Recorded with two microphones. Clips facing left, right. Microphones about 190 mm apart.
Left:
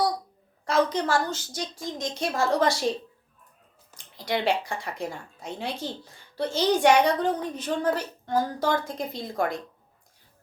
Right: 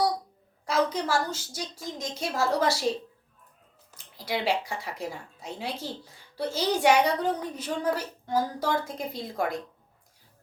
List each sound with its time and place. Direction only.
0.6 s a woman's voice: 5° right (ahead or behind)
3.9 s a woman's voice: 5° right (ahead or behind)